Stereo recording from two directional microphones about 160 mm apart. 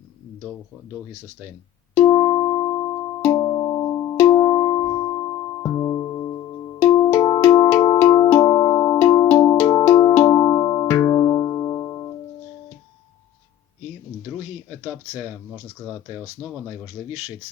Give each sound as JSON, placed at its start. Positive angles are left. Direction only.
{"t": 2.0, "sound": "music", "side_deg": 20}
{"t": 16.4, "sound": "speech", "side_deg": -10}